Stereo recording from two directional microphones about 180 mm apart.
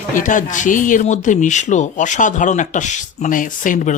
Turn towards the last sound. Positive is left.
turn(degrees=45)  # may be behind; listen again after turning